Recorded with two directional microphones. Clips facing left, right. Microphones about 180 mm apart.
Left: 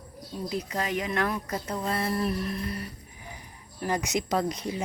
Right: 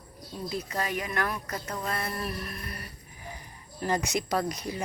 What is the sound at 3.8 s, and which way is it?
Speech, 15° left (ahead or behind).